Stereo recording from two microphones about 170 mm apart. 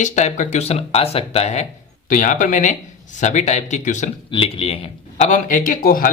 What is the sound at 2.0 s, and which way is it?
Speech, 50° left (ahead or behind).